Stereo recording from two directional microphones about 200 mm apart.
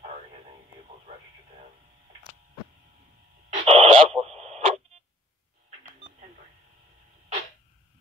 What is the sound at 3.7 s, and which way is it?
Radio, 30° right (ahead or behind).